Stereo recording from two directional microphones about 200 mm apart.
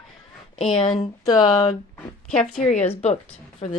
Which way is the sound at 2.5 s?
35° left (ahead or behind).